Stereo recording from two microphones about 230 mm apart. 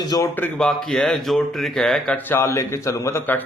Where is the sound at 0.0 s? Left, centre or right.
Centre.